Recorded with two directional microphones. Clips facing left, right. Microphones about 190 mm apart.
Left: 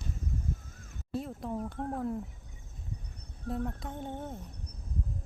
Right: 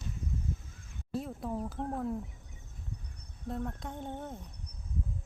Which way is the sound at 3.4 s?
Centre (ahead or behind).